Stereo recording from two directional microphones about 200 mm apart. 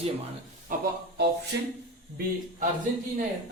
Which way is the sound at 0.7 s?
40° right (ahead or behind).